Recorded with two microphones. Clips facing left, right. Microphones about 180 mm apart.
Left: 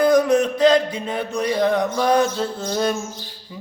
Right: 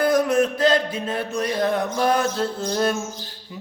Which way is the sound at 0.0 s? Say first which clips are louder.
Left 3 dB; 5° right (ahead or behind).